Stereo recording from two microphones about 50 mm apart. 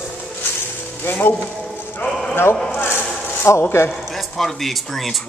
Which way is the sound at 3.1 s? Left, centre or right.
Left.